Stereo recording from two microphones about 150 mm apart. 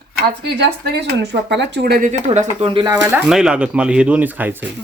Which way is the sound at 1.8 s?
90° right.